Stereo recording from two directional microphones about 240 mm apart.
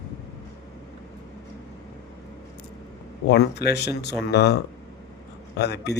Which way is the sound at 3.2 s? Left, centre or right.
Left.